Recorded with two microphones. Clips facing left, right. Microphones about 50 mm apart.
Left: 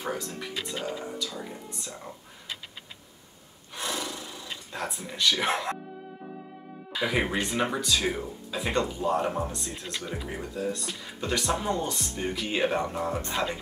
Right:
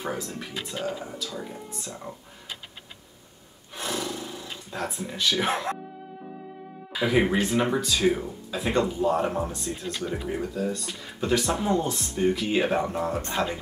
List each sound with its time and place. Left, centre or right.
0.0 s speech: centre
3.7 s roar: centre
6.9 s speech: centre
9.7 s speech: centre
10.1 s speech: centre